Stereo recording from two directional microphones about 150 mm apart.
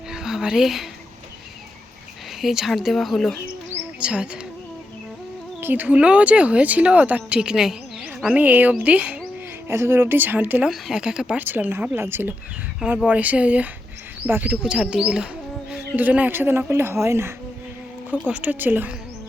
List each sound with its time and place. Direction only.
0.1 s a sound: 5° right (ahead or behind)
2.4 s speech: centre (ahead or behind)
5.5 s speech: 10° right (ahead or behind)